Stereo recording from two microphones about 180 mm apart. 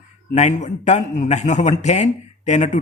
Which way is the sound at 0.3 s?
40° left (ahead or behind).